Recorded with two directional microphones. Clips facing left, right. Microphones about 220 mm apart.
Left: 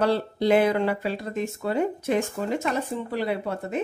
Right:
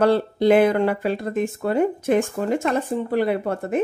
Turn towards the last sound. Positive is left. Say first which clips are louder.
# right 5 dB
turn(degrees=-50)  # may be behind; listen again after turning